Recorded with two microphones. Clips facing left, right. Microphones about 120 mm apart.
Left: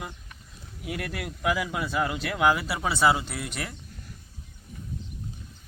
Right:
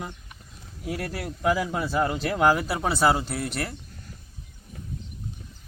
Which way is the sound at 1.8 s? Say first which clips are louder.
Right 3 dB; 35° right (ahead or behind).